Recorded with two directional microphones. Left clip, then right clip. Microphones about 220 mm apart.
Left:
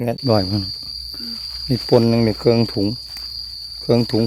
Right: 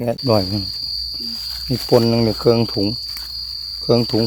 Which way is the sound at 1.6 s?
15° left (ahead or behind).